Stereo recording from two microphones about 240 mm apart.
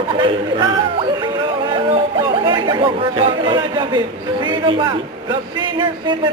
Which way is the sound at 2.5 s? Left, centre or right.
Centre.